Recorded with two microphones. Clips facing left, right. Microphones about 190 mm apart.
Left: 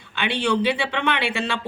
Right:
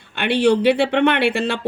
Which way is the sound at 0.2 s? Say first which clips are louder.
Right 6 dB; 60° right (ahead or behind).